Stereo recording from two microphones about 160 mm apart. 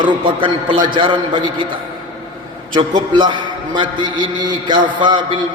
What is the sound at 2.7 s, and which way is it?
A man's voice, 30° right (ahead or behind).